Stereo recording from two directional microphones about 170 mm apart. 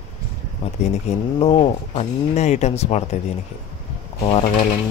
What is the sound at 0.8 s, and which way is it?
Speech, 40° left (ahead or behind).